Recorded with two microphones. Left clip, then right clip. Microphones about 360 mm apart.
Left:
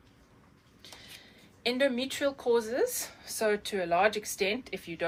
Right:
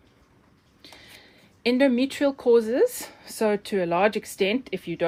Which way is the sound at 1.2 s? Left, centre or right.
Right.